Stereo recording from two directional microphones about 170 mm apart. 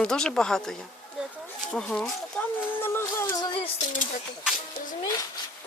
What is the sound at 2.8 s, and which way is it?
Music, 15° left (ahead or behind).